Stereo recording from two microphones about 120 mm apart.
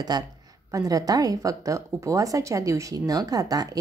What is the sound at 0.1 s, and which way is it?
A woman's voice, 35° right (ahead or behind).